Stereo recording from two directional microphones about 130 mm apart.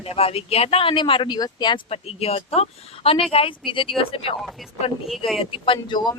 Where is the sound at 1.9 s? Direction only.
50° left (ahead or behind).